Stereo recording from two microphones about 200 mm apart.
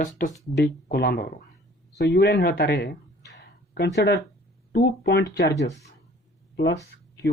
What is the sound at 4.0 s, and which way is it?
Speech, 55° left (ahead or behind).